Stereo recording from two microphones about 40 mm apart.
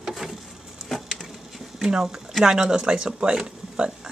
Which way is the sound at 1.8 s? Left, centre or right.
Centre.